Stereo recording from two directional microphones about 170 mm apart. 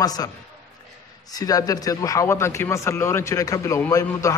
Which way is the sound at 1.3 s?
20° left (ahead or behind).